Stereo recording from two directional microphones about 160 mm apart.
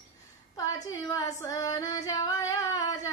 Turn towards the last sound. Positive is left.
turn(degrees=20)  # may be behind; listen again after turning